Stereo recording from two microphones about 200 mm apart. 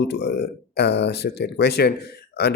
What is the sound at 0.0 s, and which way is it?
Speech, 60° left (ahead or behind).